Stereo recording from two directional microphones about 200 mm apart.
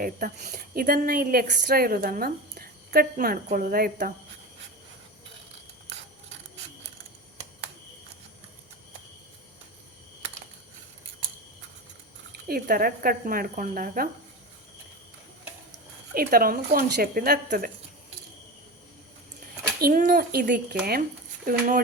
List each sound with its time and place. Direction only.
0.0 s a woman's voice: 45° right (ahead or behind)
12.5 s a woman's voice: 45° right (ahead or behind)
16.1 s a woman's voice: 45° right (ahead or behind)
19.8 s a woman's voice: 40° right (ahead or behind)